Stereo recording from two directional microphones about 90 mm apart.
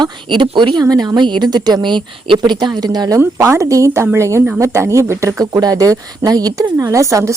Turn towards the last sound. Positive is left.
turn(degrees=-35)  # may be behind; listen again after turning